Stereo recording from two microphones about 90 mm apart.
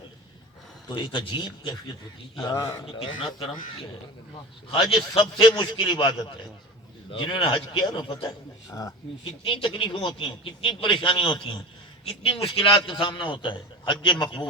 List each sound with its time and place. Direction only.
0.9 s a man's voice: 65° left (ahead or behind)
3.2 s a man's voice: 75° left (ahead or behind)
4.7 s a man's voice: 65° left (ahead or behind)
9.4 s a man's voice: 80° left; by 11.6 s 60° left (ahead or behind)
12.0 s a man's voice: 90° left; by 14.4 s 55° left (ahead or behind)